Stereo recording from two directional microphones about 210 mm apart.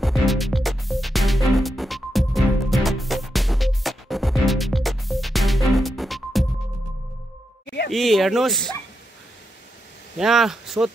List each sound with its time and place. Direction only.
0.0 s music: centre (ahead or behind)
7.6 s a sound: 55° left (ahead or behind)
7.9 s speech: centre (ahead or behind)
10.1 s speech: centre (ahead or behind)